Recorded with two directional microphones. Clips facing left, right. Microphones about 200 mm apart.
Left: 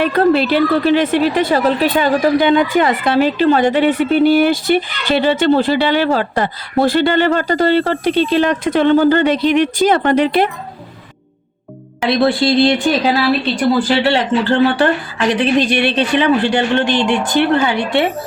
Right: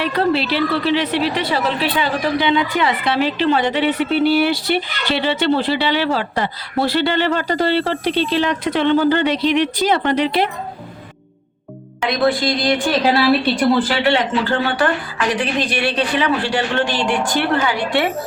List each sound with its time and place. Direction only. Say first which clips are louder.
0.0 s a woman's voice: left 5 dB; 50° left (ahead or behind)
12.0 s speech: left 4 dB; 30° left (ahead or behind)
13.0 s a woman's voice: even; centre (ahead or behind)
15.3 s speech: left 7 dB; 25° left (ahead or behind)